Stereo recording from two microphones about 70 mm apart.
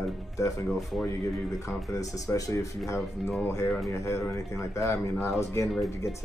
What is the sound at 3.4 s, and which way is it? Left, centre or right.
Speech, left.